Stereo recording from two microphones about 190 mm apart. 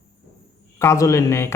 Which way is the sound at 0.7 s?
15° left (ahead or behind).